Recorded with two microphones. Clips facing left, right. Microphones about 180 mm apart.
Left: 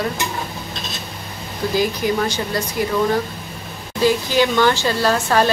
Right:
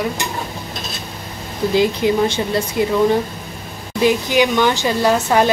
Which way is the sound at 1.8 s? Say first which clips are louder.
Right 4 dB; 25° right (ahead or behind).